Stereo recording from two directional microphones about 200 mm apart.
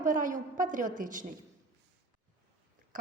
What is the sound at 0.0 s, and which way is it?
A woman's voice, 40° right (ahead or behind).